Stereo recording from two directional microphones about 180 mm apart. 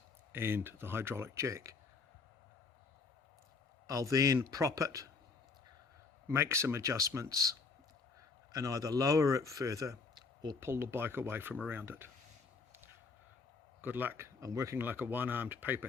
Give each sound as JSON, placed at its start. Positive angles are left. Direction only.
{"t": 0.3, "sound": "speech", "side_deg": -10}
{"t": 3.8, "sound": "speech", "side_deg": -15}
{"t": 6.2, "sound": "speech", "side_deg": -15}
{"t": 8.5, "sound": "speech", "side_deg": -20}
{"t": 13.8, "sound": "speech", "side_deg": -10}